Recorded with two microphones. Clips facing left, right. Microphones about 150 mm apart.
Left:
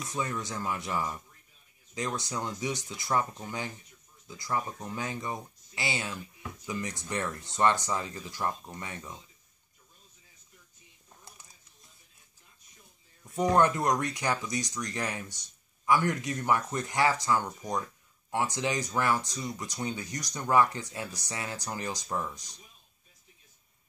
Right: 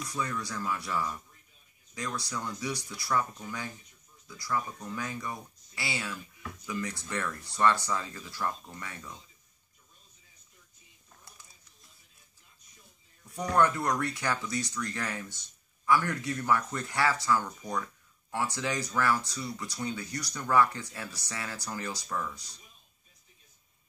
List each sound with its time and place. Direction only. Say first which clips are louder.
0.1 s speech: left 2 dB; 20° left (ahead or behind)
13.3 s speech: left 2 dB; 20° left (ahead or behind)